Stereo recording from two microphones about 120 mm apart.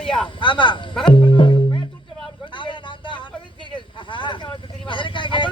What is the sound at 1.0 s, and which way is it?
Music, 45° left (ahead or behind).